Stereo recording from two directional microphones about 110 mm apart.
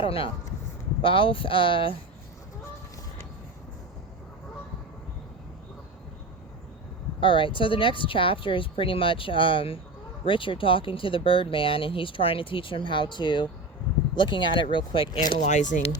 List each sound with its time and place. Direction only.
0.0 s speech: 55° left (ahead or behind)
7.2 s speech: 50° left (ahead or behind)
15.4 s speech: 90° left